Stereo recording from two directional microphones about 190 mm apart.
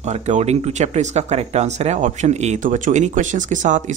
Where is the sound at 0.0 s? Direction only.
35° right (ahead or behind).